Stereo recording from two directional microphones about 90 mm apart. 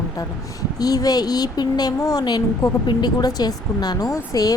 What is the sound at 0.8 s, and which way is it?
A woman's voice, 45° left (ahead or behind).